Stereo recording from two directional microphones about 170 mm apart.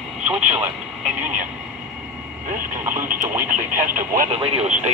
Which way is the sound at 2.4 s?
50° right (ahead or behind).